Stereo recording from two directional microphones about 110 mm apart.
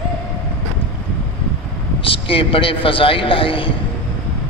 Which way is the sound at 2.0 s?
55° left (ahead or behind).